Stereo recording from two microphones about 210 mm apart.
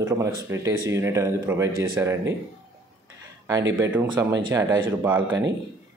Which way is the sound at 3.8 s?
10° right (ahead or behind).